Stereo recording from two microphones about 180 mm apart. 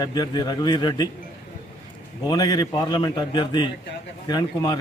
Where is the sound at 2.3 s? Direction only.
20° left (ahead or behind).